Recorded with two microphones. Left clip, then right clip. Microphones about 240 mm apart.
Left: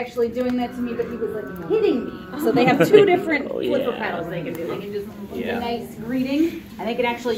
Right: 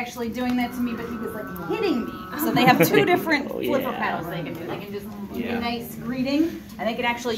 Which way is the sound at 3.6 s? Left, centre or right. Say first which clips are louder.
Left 2 dB; right.